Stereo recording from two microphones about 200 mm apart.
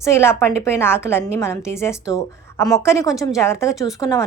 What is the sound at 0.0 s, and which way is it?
A woman's voice, 15° left (ahead or behind).